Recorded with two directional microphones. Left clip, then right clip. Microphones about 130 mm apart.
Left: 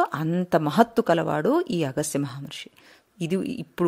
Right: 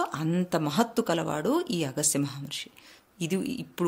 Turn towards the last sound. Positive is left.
turn(degrees=45)  # may be behind; listen again after turning